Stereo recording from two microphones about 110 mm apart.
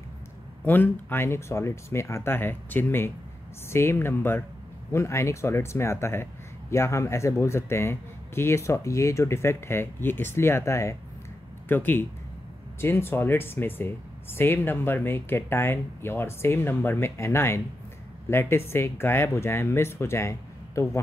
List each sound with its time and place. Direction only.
0.7 s speech: 20° left (ahead or behind)